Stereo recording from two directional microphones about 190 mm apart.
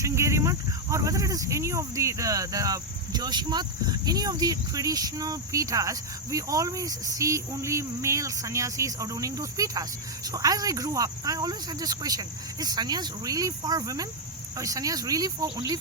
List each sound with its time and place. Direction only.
0.0 s speech: 15° right (ahead or behind)